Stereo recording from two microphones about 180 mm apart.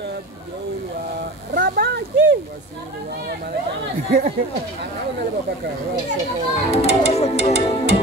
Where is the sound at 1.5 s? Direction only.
65° right (ahead or behind).